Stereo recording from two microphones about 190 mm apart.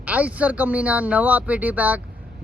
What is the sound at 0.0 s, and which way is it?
Speech, 5° right (ahead or behind).